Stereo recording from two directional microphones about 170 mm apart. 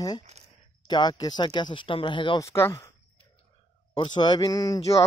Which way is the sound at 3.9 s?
25° left (ahead or behind).